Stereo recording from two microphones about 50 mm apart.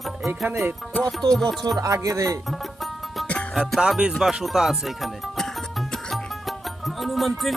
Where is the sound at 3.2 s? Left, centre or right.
Left.